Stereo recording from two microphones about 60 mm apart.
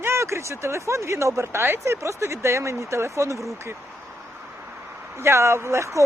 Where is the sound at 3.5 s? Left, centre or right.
Right.